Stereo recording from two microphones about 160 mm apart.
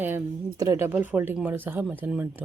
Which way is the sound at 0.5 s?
20° right (ahead or behind).